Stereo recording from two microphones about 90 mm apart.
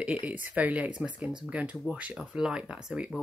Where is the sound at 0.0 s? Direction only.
15° right (ahead or behind).